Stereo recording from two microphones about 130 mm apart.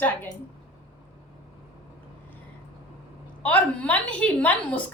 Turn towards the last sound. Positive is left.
turn(degrees=10)  # may be behind; listen again after turning